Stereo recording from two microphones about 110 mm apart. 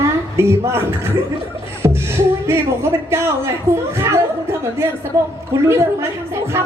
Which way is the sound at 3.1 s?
25° right (ahead or behind).